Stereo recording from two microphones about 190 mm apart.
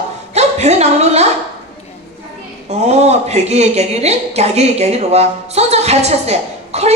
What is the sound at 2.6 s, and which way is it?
A woman's voice, 35° right (ahead or behind).